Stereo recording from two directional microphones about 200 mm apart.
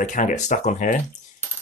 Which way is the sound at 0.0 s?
40° left (ahead or behind).